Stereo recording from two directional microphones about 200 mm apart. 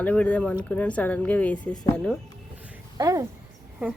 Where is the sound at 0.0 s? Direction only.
5° left (ahead or behind).